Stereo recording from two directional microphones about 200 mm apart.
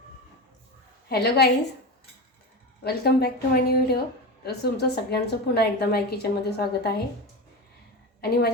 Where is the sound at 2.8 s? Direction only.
55° left (ahead or behind).